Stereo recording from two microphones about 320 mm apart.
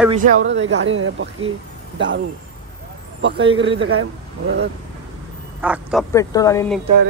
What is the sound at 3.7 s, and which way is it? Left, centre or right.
Speech, right.